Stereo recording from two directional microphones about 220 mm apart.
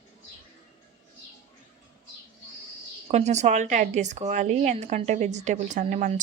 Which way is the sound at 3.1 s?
30° right (ahead or behind).